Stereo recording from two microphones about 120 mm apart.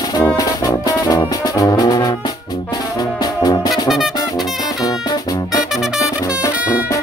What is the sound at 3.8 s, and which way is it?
Music, centre (ahead or behind).